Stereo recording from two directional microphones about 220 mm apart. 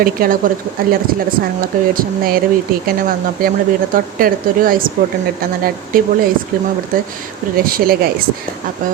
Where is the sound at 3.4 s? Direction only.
40° right (ahead or behind).